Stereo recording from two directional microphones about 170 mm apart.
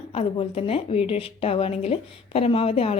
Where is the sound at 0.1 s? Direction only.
35° left (ahead or behind).